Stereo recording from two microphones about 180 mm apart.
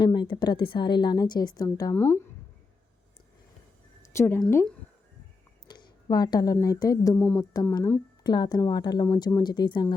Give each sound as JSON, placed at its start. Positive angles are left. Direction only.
{"t": 0.0, "sound": "a woman's voice", "side_deg": 25}
{"t": 4.0, "sound": "speech", "side_deg": 15}
{"t": 5.6, "sound": "a woman's voice", "side_deg": 20}
{"t": 7.2, "sound": "a woman's voice", "side_deg": 10}